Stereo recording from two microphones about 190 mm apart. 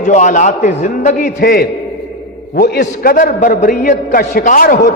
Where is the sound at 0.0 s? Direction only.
40° left (ahead or behind).